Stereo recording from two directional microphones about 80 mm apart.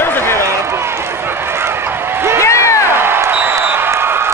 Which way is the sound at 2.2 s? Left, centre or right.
Right.